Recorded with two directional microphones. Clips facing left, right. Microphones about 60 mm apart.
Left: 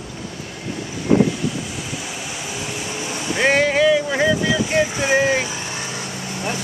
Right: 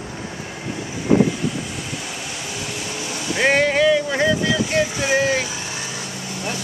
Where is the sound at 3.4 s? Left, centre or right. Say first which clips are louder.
Even; centre.